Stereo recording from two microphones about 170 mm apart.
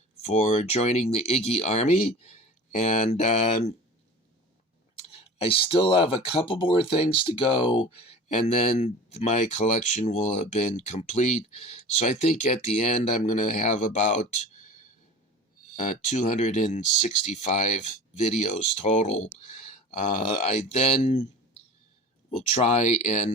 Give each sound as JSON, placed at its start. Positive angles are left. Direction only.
{"t": 0.2, "sound": "speech", "side_deg": 40}
{"t": 5.4, "sound": "speech", "side_deg": 30}
{"t": 16.0, "sound": "speech", "side_deg": 45}
{"t": 22.4, "sound": "speech", "side_deg": 40}